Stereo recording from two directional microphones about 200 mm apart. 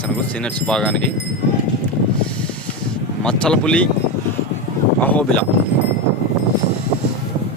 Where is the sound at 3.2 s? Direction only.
5° left (ahead or behind).